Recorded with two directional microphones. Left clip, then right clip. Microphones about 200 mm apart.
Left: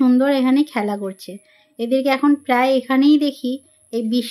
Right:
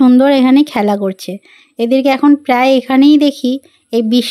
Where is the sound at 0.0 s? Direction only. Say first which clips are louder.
Right 7 dB; 40° right (ahead or behind).